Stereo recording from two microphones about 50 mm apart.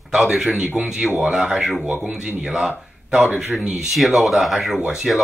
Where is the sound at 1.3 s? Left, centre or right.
Centre.